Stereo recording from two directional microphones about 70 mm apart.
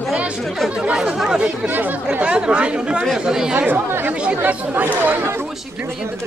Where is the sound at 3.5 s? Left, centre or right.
Right.